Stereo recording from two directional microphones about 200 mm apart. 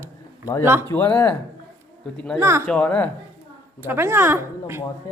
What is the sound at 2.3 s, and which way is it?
Speech, 15° right (ahead or behind).